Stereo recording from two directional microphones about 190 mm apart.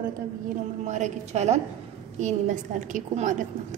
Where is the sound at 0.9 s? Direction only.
35° right (ahead or behind).